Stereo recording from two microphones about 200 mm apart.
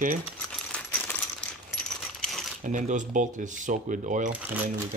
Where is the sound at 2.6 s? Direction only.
40° right (ahead or behind).